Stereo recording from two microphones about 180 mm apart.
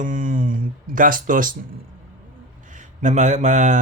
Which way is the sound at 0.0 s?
50° right (ahead or behind).